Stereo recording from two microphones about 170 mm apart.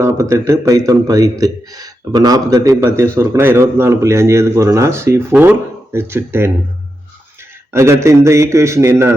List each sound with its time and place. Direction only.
0.0 s a man's voice: 15° right (ahead or behind)
7.7 s a man's voice: 15° right (ahead or behind)